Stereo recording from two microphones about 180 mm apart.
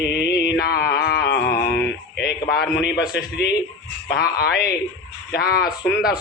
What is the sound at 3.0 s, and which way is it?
Speech, 5° right (ahead or behind).